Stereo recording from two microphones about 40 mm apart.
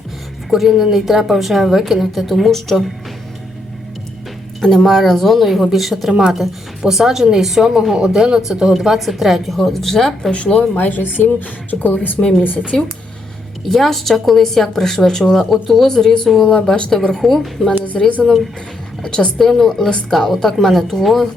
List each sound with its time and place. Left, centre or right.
0.5 s a woman's voice: centre
4.8 s a woman's voice: centre
6.1 s speech: centre
6.3 s a woman's voice: centre
10.8 s speech: left
12.7 s speech: centre
13.7 s a woman's voice: centre